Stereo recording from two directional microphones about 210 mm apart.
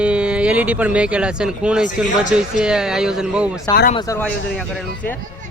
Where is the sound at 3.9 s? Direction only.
15° left (ahead or behind).